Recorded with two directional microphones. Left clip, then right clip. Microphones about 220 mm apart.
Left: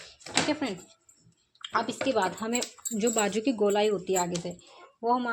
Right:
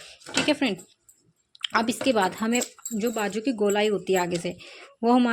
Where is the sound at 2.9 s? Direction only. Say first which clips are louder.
Even; 5° right (ahead or behind); by 4.6 s 30° right (ahead or behind).